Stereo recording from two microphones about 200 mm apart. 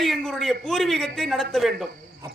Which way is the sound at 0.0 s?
Centre (ahead or behind).